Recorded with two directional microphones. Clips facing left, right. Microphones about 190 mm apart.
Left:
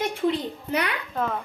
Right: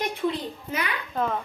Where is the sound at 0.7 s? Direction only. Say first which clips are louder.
Left 4 dB; 65° left (ahead or behind).